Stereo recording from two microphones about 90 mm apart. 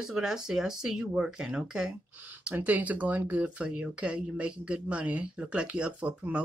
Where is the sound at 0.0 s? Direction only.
5° right (ahead or behind).